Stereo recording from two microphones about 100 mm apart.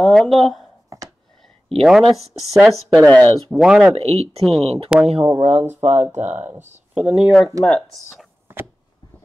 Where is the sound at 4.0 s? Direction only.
90° right.